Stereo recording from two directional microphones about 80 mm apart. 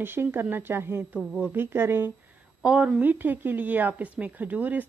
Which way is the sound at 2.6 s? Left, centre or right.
Centre.